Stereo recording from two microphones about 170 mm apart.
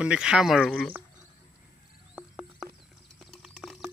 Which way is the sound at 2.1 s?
Centre (ahead or behind).